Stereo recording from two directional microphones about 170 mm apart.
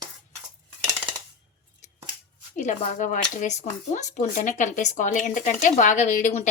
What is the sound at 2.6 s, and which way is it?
Speech, 45° left (ahead or behind).